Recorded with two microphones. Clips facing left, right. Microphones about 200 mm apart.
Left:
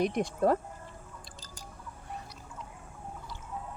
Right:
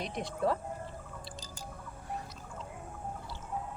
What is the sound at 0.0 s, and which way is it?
Speech, 45° left (ahead or behind).